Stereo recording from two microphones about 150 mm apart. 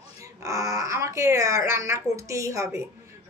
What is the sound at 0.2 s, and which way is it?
Speech, 20° right (ahead or behind).